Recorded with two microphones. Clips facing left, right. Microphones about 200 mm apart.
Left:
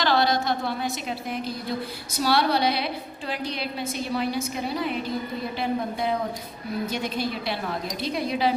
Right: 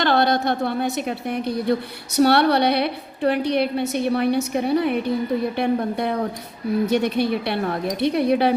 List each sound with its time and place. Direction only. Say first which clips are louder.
0.0 s a woman's voice: right 4 dB; 55° right (ahead or behind)